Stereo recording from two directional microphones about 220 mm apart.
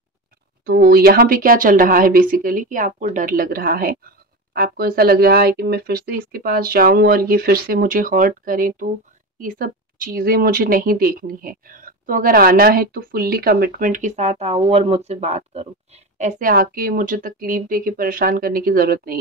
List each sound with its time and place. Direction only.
0.7 s speech: 45° right (ahead or behind)